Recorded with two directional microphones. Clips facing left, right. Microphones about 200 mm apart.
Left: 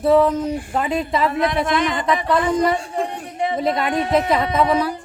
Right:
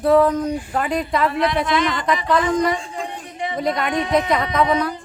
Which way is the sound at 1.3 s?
50° left (ahead or behind).